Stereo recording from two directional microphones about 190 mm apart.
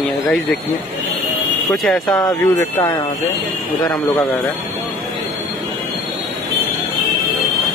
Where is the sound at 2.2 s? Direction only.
20° left (ahead or behind).